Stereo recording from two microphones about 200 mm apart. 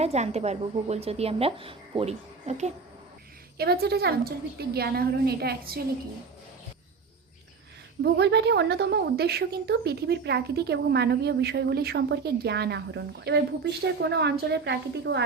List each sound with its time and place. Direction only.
0.0 s a woman's voice: 30° right (ahead or behind)
3.6 s a woman's voice: 50° right (ahead or behind)
8.0 s a woman's voice: 60° right (ahead or behind)